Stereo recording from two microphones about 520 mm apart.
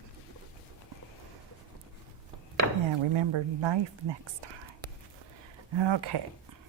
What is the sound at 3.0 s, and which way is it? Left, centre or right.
Speech, right.